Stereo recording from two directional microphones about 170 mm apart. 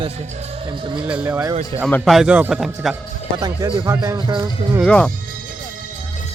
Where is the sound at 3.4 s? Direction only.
25° right (ahead or behind).